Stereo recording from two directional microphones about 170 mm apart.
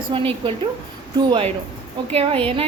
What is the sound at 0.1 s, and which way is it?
Speech, 30° right (ahead or behind).